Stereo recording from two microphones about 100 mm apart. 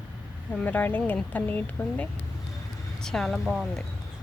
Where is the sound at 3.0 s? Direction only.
5° left (ahead or behind).